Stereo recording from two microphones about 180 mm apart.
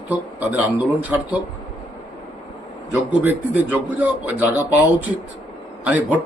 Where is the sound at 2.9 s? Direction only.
10° right (ahead or behind).